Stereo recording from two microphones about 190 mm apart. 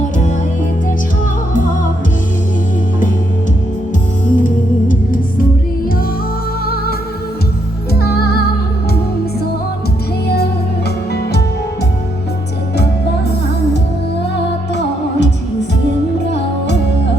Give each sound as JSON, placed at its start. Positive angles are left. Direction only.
{"t": 1.5, "sound": "music", "side_deg": 40}
{"t": 4.4, "sound": "music", "side_deg": 45}
{"t": 11.1, "sound": "music", "side_deg": 60}
{"t": 14.3, "sound": "music", "side_deg": 65}